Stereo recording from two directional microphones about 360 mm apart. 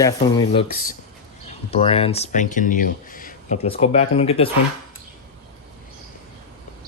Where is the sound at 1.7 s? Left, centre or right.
Centre.